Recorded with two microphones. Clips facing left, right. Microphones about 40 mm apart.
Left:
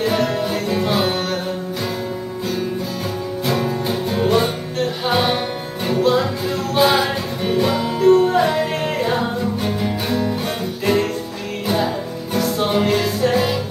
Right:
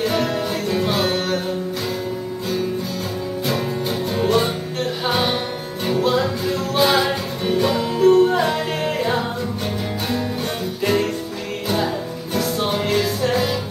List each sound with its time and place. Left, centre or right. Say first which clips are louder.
0.0 s music: left 2 dB; centre
3.4 s music: left 3 dB; centre
12.4 s music: left 3 dB; centre